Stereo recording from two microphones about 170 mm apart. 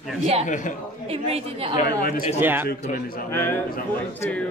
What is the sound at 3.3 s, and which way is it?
Speech, 15° left (ahead or behind).